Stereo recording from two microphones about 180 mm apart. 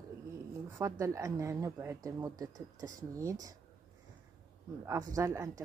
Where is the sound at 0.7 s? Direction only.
15° right (ahead or behind).